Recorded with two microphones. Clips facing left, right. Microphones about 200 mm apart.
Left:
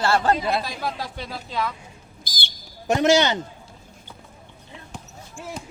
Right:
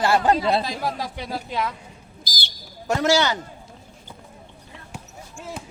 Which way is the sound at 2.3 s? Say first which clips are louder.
Right 2 dB; 55° left (ahead or behind).